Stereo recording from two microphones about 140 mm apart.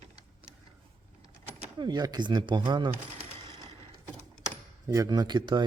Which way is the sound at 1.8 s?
30° right (ahead or behind).